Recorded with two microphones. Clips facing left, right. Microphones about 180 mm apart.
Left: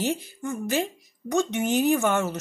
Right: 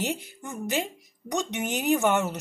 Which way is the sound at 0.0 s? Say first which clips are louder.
Left 4 dB; 20° right (ahead or behind).